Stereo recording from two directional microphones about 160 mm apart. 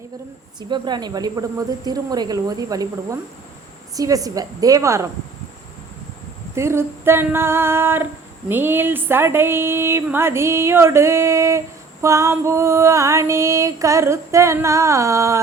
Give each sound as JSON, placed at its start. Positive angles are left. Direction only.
{"t": 0.7, "sound": "music", "side_deg": -25}
{"t": 6.6, "sound": "speech", "side_deg": -15}
{"t": 12.0, "sound": "music", "side_deg": -20}